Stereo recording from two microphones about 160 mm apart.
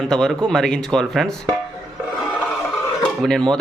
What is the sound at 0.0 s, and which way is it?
Speech, centre (ahead or behind).